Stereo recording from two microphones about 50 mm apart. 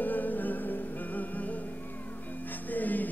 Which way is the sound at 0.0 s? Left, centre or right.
Left.